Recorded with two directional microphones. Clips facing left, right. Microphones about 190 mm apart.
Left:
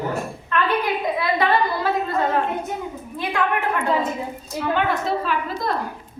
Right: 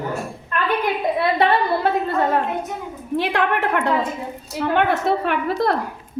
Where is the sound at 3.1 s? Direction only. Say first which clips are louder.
Right 4 dB; 75° right (ahead or behind).